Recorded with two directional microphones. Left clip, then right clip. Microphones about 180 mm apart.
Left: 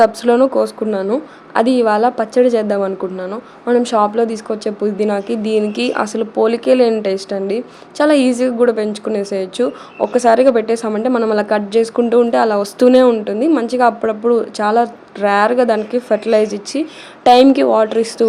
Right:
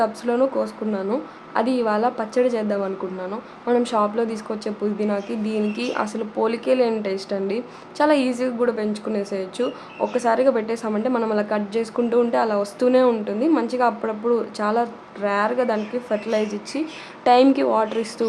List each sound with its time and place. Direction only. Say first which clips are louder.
0.0 s a woman's voice: left 9 dB; 40° left (ahead or behind)